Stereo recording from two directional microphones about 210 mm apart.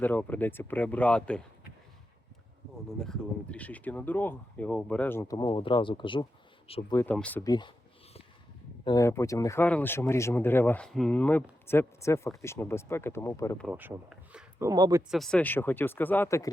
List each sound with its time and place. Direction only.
0.0 s speech: 10° left (ahead or behind)
3.0 s speech: 5° left (ahead or behind); by 6.2 s 25° left (ahead or behind)
6.9 s speech: 10° left (ahead or behind)
7.4 s speech: 20° left (ahead or behind)
8.8 s speech: 20° left (ahead or behind)
13.7 s speech: 5° right (ahead or behind)
15.1 s speech: centre (ahead or behind)